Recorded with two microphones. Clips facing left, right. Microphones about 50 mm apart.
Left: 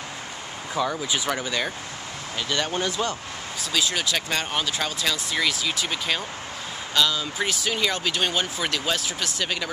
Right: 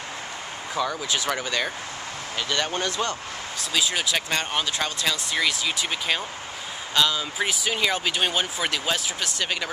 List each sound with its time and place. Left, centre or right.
0.7 s speech: centre
1.3 s speech: centre
3.7 s speech: centre